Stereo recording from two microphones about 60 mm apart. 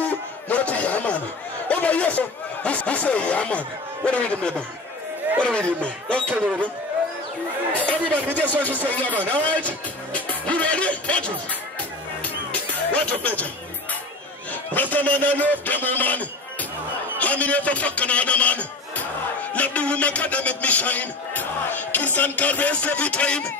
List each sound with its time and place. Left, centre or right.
0.0 s a sound: left
1.7 s a man's voice: left
5.7 s a man's voice: centre
7.7 s a man's voice: left
12.2 s music: left
14.7 s a man's voice: left